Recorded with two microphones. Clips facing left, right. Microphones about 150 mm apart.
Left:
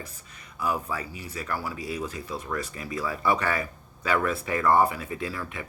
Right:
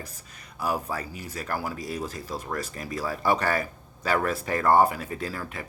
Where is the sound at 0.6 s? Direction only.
40° right (ahead or behind).